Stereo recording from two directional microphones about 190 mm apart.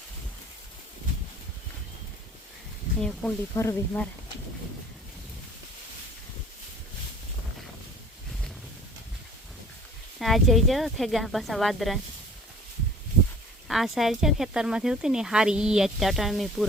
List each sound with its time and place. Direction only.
3.0 s speech: 10° left (ahead or behind)
10.2 s speech: centre (ahead or behind)
13.7 s speech: centre (ahead or behind)